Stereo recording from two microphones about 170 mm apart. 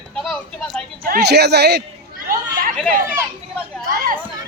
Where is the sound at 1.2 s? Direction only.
75° right (ahead or behind).